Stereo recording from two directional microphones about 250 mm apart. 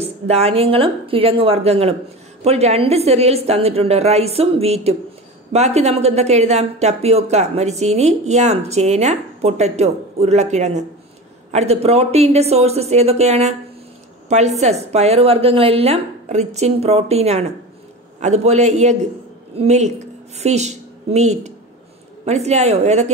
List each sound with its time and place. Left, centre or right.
0.0 s a woman's voice: right